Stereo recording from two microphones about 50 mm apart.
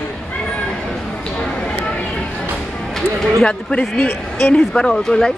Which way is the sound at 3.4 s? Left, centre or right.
Left.